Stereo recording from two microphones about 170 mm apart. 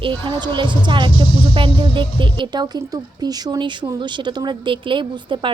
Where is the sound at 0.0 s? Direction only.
30° right (ahead or behind).